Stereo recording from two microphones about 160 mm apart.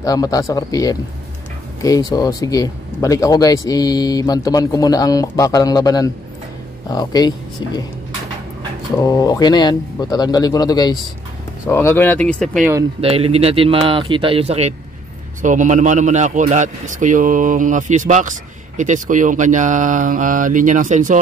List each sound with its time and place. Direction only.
0.0 s speech: 20° left (ahead or behind)
9.0 s speech: 20° left (ahead or behind); by 12.6 s 5° left (ahead or behind)
13.0 s speech: 40° right (ahead or behind)
15.4 s a man's voice: 50° right (ahead or behind)